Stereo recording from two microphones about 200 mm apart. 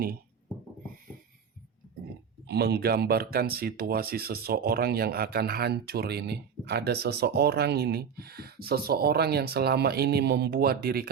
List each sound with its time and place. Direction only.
2.5 s speech: 50° right (ahead or behind)